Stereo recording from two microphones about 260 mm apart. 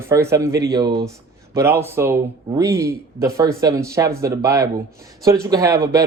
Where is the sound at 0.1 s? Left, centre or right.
Centre.